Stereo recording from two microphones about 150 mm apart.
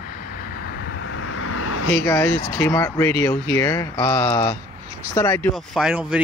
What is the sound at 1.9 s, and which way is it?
Speech, 15° left (ahead or behind).